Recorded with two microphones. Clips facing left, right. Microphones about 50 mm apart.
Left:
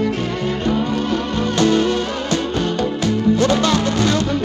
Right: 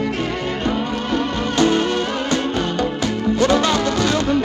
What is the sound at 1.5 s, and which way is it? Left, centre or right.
Music, right.